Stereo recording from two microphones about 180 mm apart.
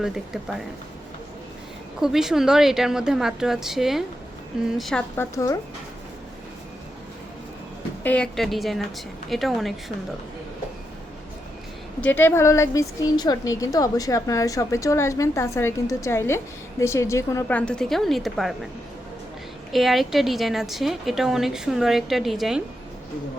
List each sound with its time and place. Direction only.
2.0 s a woman's voice: centre (ahead or behind)
5.1 s a woman's voice: 15° left (ahead or behind)
8.0 s a woman's voice: 5° left (ahead or behind)
11.9 s a woman's voice: 10° left (ahead or behind)
19.7 s a woman's voice: centre (ahead or behind)